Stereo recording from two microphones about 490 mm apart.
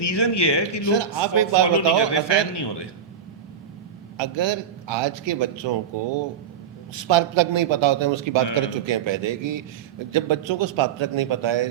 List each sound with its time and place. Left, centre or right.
0.0 s speech: left
0.9 s a man's voice: right
2.0 s a man's voice: left
4.2 s a man's voice: right
6.9 s a man's voice: right